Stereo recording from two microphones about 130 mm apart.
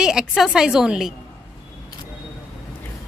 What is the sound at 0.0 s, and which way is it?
A woman's voice, 5° right (ahead or behind).